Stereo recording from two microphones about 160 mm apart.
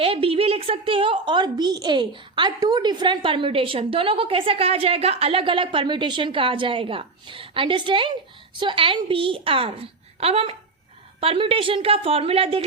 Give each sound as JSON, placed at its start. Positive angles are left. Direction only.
{"t": 0.0, "sound": "a woman's voice", "side_deg": -35}